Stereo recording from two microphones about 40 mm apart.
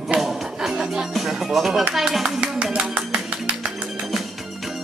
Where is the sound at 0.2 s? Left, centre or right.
Centre.